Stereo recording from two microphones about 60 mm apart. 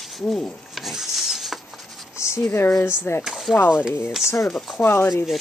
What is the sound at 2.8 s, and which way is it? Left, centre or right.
Speech, left.